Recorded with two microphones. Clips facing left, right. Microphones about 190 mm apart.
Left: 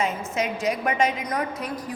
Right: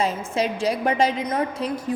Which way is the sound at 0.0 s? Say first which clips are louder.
Right 3 dB; 30° right (ahead or behind).